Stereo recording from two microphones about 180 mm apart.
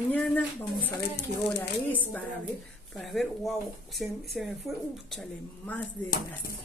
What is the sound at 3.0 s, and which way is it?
Speech, centre (ahead or behind).